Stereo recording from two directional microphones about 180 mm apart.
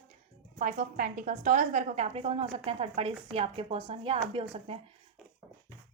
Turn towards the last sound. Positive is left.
turn(degrees=-30)  # may be behind; listen again after turning